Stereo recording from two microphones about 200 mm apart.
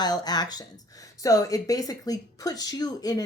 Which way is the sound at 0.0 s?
20° left (ahead or behind).